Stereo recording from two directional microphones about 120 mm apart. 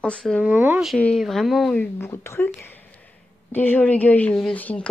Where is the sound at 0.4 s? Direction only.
15° right (ahead or behind).